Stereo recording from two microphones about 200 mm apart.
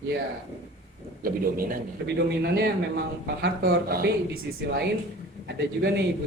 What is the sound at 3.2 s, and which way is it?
A man's voice, 50° right (ahead or behind).